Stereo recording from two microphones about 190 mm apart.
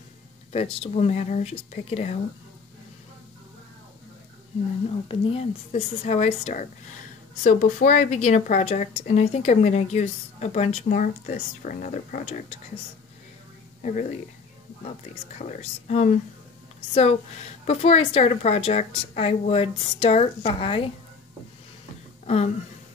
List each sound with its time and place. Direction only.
0.5 s a woman's voice: 30° left (ahead or behind)
4.8 s a woman's voice: 30° left (ahead or behind)
13.8 s a woman's voice: 40° left (ahead or behind)
22.2 s speech: 35° left (ahead or behind)